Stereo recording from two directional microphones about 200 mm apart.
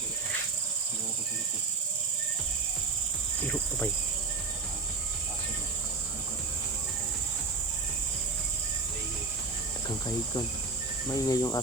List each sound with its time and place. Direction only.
11.1 s speech: 15° left (ahead or behind)